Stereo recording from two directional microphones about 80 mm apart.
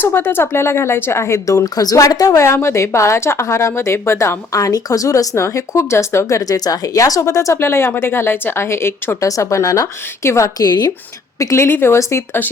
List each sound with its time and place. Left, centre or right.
0.0 s speech: left
9.2 s speech: left
10.6 s speech: left
11.3 s speech: left